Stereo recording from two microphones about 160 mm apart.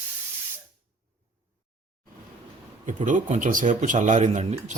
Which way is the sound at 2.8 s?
50° right (ahead or behind).